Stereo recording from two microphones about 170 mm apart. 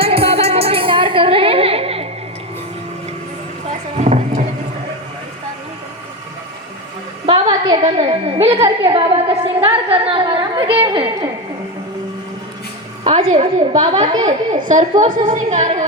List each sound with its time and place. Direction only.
0.0 s music: 35° right (ahead or behind)
3.9 s a sound: 40° right (ahead or behind)
7.3 s a sound: 30° right (ahead or behind)
8.8 s a woman's voice: 30° right (ahead or behind)
13.1 s a woman's voice: 35° right (ahead or behind)
14.6 s a woman's voice: 50° right (ahead or behind)